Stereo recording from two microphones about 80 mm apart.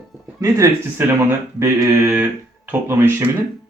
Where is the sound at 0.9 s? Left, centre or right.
Right.